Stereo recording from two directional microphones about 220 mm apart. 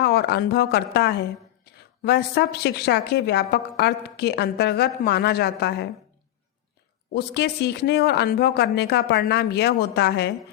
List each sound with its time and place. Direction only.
0.0 s a woman's voice: 45° left (ahead or behind)
7.1 s a woman's voice: 45° left (ahead or behind)